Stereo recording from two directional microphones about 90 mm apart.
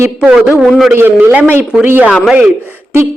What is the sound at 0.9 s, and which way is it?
Speech, 20° right (ahead or behind).